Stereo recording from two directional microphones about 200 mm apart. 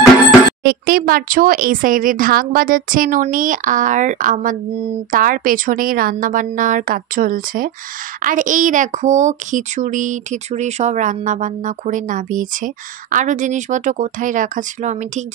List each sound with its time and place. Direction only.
0.7 s speech: 50° right (ahead or behind)